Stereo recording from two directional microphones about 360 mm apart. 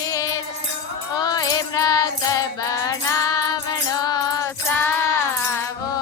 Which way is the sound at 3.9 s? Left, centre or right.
Centre.